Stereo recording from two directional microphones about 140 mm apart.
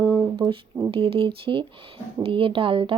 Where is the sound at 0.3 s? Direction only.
35° right (ahead or behind).